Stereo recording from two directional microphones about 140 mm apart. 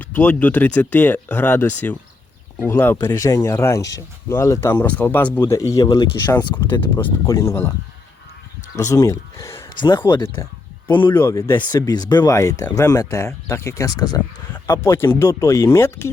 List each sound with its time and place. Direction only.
0.0 s speech: 10° left (ahead or behind)
5.5 s speech: 25° left (ahead or behind)
6.3 s speech: 15° left (ahead or behind)
8.7 s speech: 20° left (ahead or behind)
9.6 s speech: 35° left (ahead or behind)
11.1 s speech: 20° left (ahead or behind)
11.5 s speech: 35° left (ahead or behind); by 16.0 s 20° left (ahead or behind)